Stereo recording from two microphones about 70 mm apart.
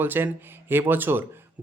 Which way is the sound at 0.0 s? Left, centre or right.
Right.